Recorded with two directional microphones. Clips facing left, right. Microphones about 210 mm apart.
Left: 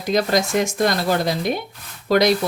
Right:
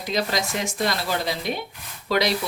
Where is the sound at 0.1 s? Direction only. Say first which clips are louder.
Left 7 dB; 45° left (ahead or behind).